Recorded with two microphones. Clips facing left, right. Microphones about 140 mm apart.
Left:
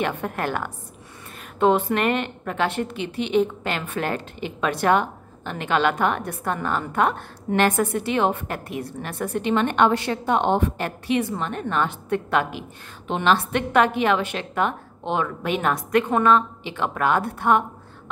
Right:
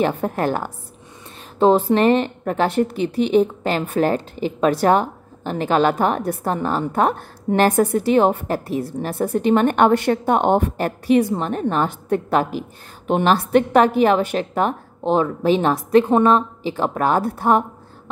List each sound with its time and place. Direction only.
0.0 s a woman's voice: 35° right (ahead or behind)